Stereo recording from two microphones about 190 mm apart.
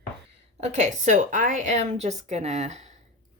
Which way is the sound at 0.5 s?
35° right (ahead or behind).